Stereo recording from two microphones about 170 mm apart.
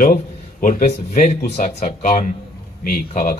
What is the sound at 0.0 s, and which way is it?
A man's voice, 55° left (ahead or behind).